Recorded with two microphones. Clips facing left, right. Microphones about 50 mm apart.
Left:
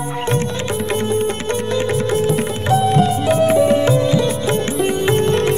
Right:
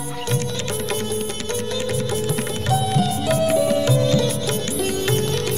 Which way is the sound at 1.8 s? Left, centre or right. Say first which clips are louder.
Left 7 dB; left.